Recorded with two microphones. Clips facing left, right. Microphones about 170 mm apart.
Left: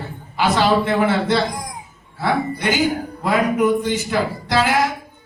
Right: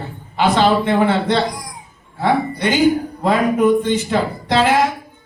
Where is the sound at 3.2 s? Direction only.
30° right (ahead or behind).